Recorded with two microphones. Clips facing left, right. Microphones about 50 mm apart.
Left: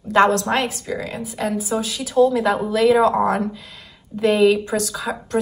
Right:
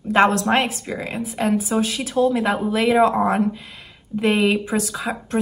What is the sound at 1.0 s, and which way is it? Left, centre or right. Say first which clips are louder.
A woman's voice: right 4 dB; right.